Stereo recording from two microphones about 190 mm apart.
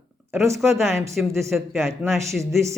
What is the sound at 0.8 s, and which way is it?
Speech, 15° right (ahead or behind).